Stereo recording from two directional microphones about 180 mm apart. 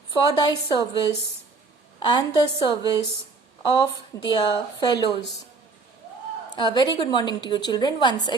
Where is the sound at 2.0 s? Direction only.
20° left (ahead or behind).